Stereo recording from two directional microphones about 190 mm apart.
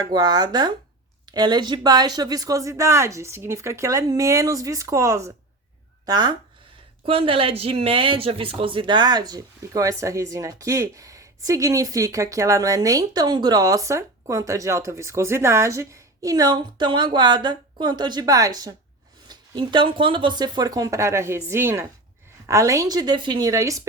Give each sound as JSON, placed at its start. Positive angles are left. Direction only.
{"t": 0.0, "sound": "speech", "side_deg": -20}